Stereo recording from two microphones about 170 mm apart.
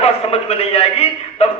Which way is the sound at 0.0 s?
35° left (ahead or behind).